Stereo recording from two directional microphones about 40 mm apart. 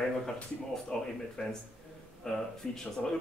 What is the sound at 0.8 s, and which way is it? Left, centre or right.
Speech, centre.